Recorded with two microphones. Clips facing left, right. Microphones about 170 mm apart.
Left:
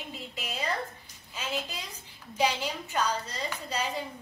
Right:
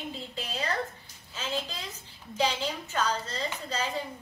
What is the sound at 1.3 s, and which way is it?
A woman's voice, 10° left (ahead or behind).